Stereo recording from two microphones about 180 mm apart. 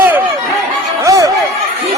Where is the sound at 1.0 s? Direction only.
20° right (ahead or behind).